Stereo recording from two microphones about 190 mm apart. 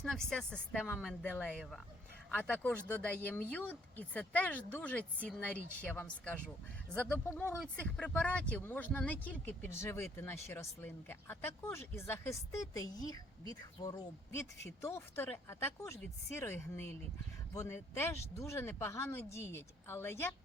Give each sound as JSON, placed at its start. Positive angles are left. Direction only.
{"t": 0.0, "sound": "speech", "side_deg": 5}